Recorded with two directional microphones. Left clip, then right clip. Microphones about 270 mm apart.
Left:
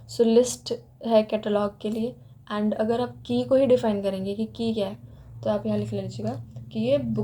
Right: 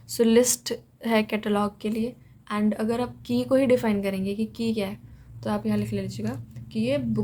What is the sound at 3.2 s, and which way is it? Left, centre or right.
Speech, right.